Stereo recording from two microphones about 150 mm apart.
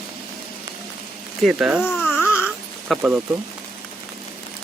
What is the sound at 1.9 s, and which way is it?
Baby cry, 10° left (ahead or behind).